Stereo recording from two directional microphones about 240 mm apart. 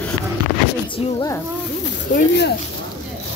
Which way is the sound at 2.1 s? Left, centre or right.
Left.